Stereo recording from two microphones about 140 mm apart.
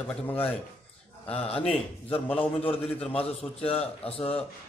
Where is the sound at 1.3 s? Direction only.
45° left (ahead or behind).